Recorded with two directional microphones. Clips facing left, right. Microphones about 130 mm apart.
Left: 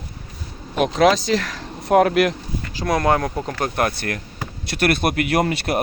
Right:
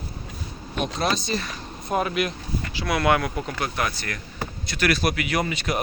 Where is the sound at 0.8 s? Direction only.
90° left; by 2.3 s 75° left (ahead or behind).